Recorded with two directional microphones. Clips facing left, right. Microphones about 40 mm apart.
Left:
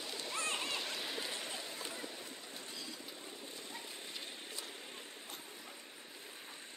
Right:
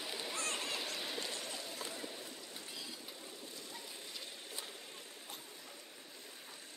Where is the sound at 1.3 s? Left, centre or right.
Left.